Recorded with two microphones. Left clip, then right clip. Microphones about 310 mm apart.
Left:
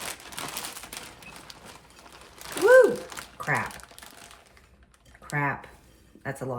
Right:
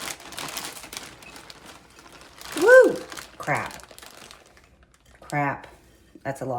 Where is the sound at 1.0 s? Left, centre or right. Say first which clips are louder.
Right 3 dB; centre.